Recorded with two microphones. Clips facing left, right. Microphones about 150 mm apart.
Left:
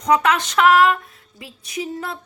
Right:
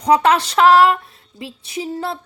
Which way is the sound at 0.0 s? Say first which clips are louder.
Right 3 dB; 30° right (ahead or behind).